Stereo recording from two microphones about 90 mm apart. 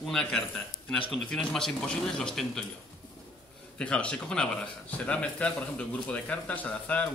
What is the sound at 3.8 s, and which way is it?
Speech, 10° left (ahead or behind).